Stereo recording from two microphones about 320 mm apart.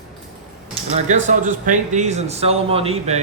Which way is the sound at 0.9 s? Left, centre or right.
Right.